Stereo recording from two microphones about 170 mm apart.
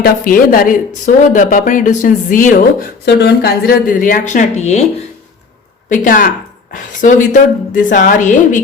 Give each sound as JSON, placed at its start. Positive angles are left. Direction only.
{"t": 0.0, "sound": "speech", "side_deg": 55}
{"t": 5.9, "sound": "speech", "side_deg": 50}